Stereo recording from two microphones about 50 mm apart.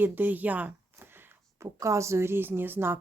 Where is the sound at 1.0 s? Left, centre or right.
Right.